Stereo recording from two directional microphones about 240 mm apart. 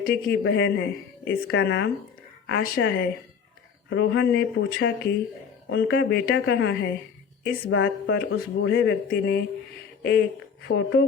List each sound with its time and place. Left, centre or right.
0.0 s a woman's voice: left